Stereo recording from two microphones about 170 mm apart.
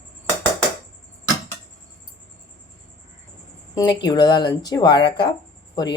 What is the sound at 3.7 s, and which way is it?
Speech, 25° left (ahead or behind).